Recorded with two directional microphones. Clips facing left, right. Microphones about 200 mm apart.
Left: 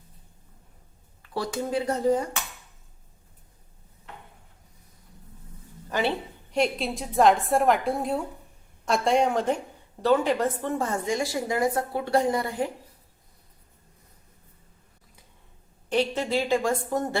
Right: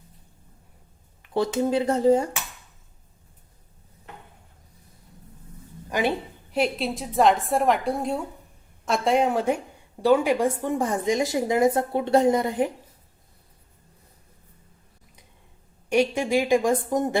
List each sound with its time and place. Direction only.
1.2 s a woman's voice: 20° right (ahead or behind)
5.9 s a woman's voice: 15° right (ahead or behind)
15.9 s a woman's voice: 10° right (ahead or behind)